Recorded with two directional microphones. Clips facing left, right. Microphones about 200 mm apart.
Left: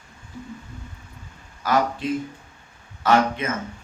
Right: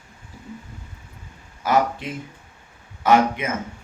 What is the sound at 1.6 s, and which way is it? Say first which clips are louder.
A man's voice: right 1 dB; 20° right (ahead or behind).